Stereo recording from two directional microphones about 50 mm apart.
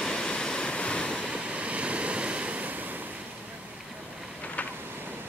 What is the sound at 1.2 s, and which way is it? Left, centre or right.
Waves, right.